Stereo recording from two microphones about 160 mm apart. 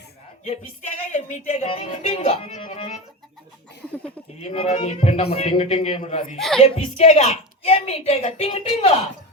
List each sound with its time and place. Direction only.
0.4 s speech: 50° left (ahead or behind)
4.4 s a woman's voice: 40° left (ahead or behind)